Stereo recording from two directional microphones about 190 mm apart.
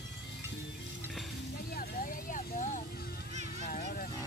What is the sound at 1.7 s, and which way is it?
Vehicle, 55° left (ahead or behind).